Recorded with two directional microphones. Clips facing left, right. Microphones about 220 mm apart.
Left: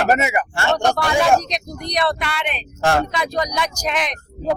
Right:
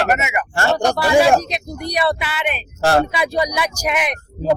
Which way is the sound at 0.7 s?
5° right (ahead or behind).